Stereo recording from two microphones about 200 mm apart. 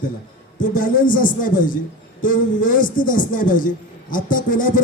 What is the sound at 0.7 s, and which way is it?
A man's voice, 45° left (ahead or behind).